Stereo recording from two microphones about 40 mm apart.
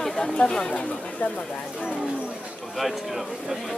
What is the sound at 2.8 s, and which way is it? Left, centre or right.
Speech, centre.